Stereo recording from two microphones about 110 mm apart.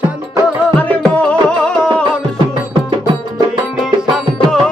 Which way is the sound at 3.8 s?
Centre (ahead or behind).